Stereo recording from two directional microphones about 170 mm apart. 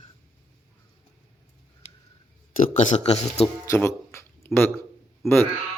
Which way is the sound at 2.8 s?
45° left (ahead or behind).